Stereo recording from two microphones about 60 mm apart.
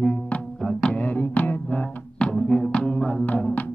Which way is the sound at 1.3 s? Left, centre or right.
Left.